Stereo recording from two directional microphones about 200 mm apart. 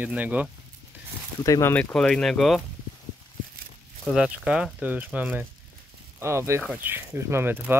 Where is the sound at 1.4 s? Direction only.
15° left (ahead or behind).